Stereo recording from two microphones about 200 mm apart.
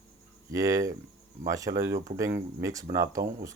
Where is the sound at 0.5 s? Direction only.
15° right (ahead or behind).